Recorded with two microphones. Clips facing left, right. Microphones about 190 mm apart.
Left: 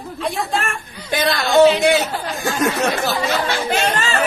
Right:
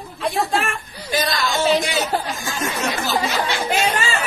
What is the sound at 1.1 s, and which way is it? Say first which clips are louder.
Speech: left 3 dB; 60° left (ahead or behind).